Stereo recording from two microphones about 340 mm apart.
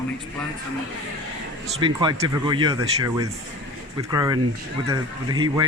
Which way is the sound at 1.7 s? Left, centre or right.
Centre.